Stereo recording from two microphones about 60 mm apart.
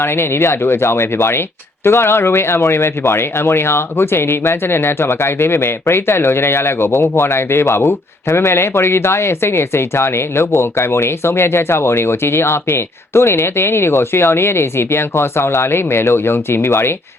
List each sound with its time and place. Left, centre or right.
0.0 s speech: left